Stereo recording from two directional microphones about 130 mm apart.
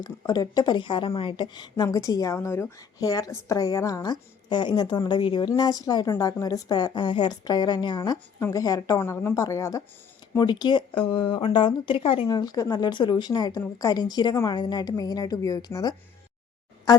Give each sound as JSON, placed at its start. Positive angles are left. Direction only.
{"t": 0.2, "sound": "a woman's voice", "side_deg": 30}
{"t": 8.4, "sound": "a woman's voice", "side_deg": 25}